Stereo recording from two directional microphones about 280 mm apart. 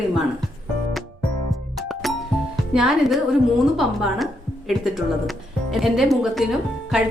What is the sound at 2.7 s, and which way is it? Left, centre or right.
Speech, centre.